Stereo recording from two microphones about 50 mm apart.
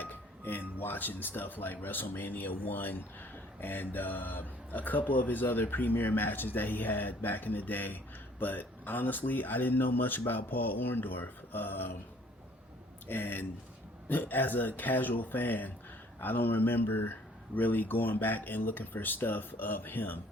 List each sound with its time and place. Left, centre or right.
0.0 s speech: left
13.1 s speech: left